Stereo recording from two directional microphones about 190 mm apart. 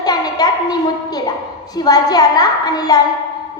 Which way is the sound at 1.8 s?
20° left (ahead or behind).